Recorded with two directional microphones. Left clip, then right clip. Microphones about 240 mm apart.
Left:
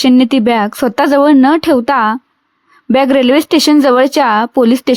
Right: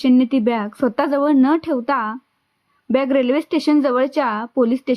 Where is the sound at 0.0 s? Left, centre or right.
Left.